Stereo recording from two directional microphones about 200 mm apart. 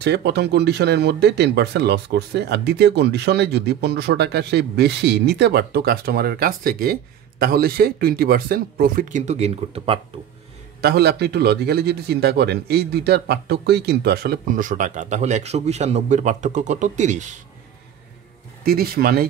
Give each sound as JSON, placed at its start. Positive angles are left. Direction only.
{"t": 0.0, "sound": "speech", "side_deg": -55}
{"t": 10.8, "sound": "a man's voice", "side_deg": -55}
{"t": 18.7, "sound": "a man's voice", "side_deg": -50}